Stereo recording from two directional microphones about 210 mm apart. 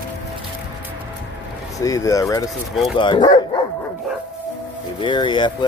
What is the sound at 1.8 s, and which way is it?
Speech, 15° left (ahead or behind).